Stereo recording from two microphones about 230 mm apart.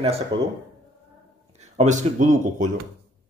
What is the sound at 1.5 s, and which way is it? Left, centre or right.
Speech, right.